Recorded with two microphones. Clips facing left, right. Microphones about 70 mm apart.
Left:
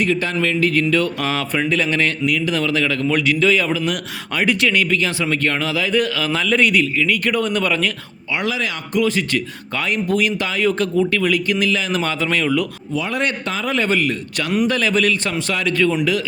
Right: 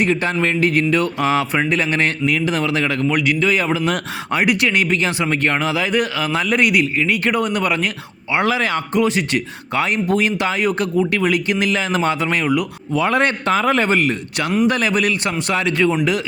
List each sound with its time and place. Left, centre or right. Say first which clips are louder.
0.0 s speech: right 1 dB; right
3.1 s a man's voice: left 2 dB; centre
3.5 s speech: right 1 dB; right
8.4 s a man's voice: right 5 dB; right
9.0 s speech: left 1 dB; right
12.9 s a man's voice: right 7 dB; right
13.2 s a man's voice: right 5 dB; right
13.8 s speech: right 2 dB; right